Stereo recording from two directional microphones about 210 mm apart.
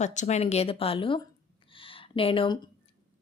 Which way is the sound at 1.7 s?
25° left (ahead or behind).